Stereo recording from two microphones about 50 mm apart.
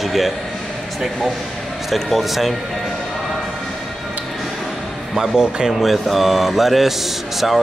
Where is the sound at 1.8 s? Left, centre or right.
Centre.